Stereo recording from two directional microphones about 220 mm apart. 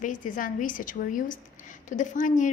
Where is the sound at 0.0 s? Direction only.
35° left (ahead or behind).